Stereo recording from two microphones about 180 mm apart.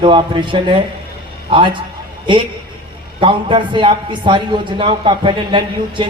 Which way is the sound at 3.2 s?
30° right (ahead or behind).